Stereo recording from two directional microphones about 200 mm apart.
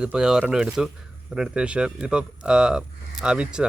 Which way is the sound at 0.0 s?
5° right (ahead or behind).